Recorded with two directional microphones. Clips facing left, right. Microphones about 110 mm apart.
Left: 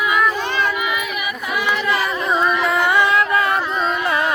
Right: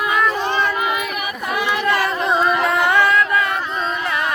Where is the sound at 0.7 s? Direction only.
45° right (ahead or behind).